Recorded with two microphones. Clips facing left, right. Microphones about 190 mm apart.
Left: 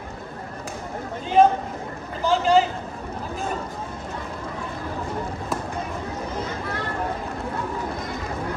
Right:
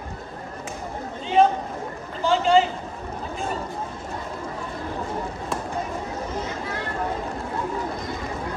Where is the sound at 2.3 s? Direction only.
Centre (ahead or behind).